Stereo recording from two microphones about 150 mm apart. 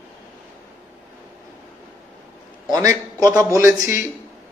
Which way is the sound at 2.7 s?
25° right (ahead or behind).